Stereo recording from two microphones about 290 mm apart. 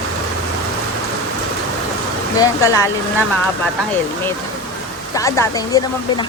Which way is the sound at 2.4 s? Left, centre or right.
Centre.